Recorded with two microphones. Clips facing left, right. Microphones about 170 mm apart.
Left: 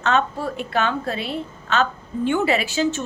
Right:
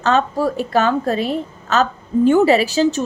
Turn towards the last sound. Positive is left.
turn(degrees=-35)  # may be behind; listen again after turning